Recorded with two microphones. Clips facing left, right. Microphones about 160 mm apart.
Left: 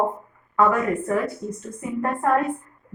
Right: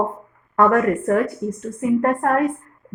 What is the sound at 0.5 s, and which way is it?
A woman's voice, 70° right (ahead or behind).